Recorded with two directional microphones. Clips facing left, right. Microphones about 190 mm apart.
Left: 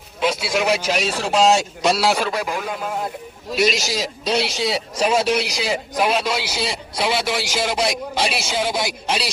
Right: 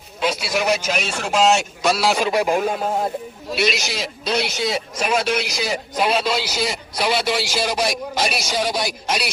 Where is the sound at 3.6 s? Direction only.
40° left (ahead or behind).